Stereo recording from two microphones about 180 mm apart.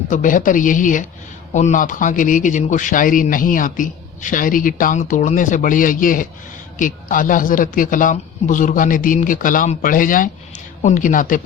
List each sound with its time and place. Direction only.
0.1 s a man's voice: 45° left (ahead or behind)